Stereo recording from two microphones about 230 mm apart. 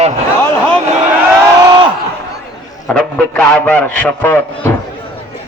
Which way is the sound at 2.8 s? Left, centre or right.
Centre.